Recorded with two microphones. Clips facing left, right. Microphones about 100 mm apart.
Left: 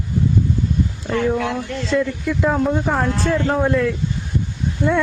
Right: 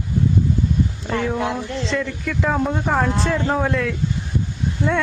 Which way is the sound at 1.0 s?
Centre (ahead or behind).